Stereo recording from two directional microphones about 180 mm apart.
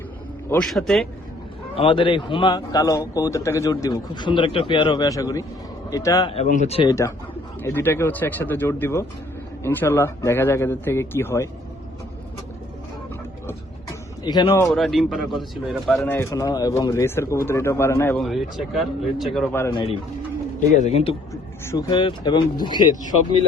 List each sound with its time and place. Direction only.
0.5 s speech: centre (ahead or behind)
1.7 s a man's voice: 30° left (ahead or behind)
6.3 s speech: 40° left (ahead or behind)
6.8 s speech: 15° left (ahead or behind)
14.3 s a man's voice: 20° left (ahead or behind)
14.7 s speech: centre (ahead or behind)
16.0 s speech: 15° left (ahead or behind)
18.3 s speech: centre (ahead or behind)
19.7 s a man's voice: 30° left (ahead or behind)
21.7 s a man's voice: 20° left (ahead or behind)